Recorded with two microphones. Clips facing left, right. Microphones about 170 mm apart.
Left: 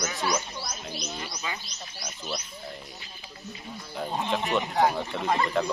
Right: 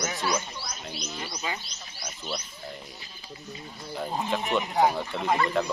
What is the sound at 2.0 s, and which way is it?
Speech, 10° right (ahead or behind).